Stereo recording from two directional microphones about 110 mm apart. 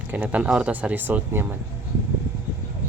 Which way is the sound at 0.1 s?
15° right (ahead or behind).